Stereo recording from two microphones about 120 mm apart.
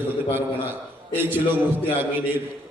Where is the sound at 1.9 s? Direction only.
15° right (ahead or behind).